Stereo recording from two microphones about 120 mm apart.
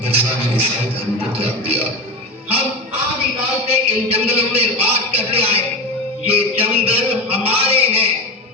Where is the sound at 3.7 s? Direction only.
55° right (ahead or behind).